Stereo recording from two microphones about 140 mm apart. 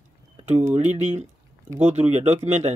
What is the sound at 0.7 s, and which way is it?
Speech, 55° right (ahead or behind).